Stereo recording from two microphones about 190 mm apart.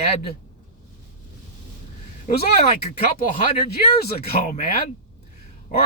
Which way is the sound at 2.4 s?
35° left (ahead or behind).